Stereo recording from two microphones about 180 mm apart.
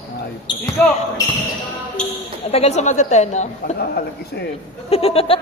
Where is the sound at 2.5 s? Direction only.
35° left (ahead or behind).